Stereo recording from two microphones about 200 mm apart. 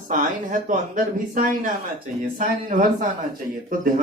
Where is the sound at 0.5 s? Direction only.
40° right (ahead or behind).